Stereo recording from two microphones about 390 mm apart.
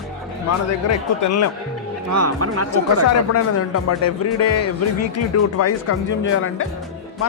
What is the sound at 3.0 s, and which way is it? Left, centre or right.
Speech, left.